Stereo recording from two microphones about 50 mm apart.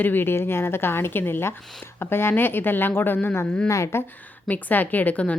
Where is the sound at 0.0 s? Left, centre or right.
Left.